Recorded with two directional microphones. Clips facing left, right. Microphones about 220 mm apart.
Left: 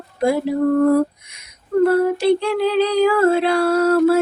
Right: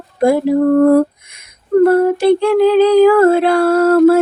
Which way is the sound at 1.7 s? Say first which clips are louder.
Right 5 dB; 50° right (ahead or behind).